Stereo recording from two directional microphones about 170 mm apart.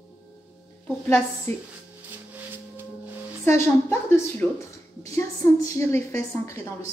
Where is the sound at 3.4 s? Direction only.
15° left (ahead or behind).